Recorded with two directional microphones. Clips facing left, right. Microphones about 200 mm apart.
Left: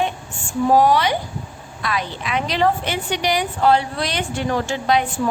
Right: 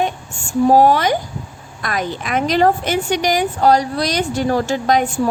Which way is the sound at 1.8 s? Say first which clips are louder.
Right 3 dB; 45° right (ahead or behind).